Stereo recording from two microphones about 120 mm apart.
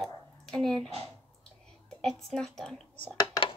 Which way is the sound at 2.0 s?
5° left (ahead or behind).